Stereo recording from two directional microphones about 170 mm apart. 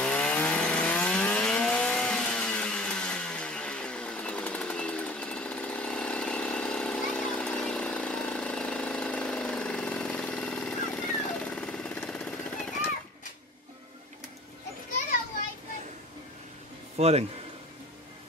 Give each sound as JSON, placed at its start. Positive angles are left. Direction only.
{"t": 0.0, "sound": "vehicle", "side_deg": 5}
{"t": 16.9, "sound": "speech", "side_deg": -40}